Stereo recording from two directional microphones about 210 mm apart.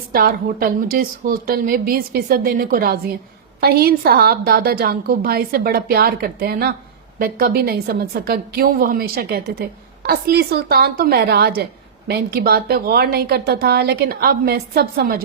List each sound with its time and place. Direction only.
0.1 s a woman's voice: 45° right (ahead or behind)